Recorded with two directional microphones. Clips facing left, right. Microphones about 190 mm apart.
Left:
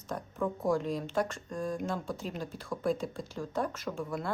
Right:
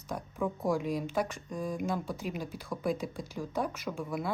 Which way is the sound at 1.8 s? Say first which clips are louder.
Right 1 dB; 15° right (ahead or behind).